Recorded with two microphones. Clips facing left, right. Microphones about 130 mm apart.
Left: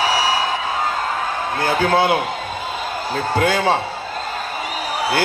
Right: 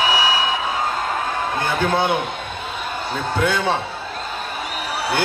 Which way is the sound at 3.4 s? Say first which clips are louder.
Left 3 dB; 90° left.